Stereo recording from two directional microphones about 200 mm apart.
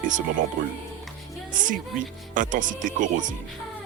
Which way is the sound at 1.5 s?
40° right (ahead or behind).